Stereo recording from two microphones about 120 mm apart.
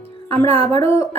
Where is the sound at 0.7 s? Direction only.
20° left (ahead or behind).